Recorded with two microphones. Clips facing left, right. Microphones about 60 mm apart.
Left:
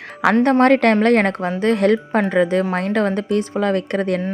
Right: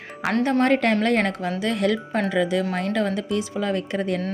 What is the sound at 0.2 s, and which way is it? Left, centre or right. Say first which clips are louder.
Speech: left 8 dB; left.